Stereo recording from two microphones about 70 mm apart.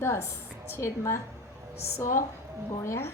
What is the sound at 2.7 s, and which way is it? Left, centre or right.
Speech, left.